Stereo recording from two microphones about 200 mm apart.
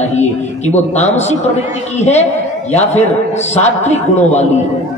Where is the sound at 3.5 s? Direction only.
35° left (ahead or behind).